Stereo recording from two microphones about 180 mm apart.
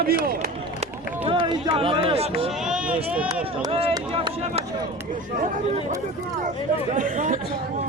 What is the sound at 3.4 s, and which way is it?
Speech, 30° right (ahead or behind).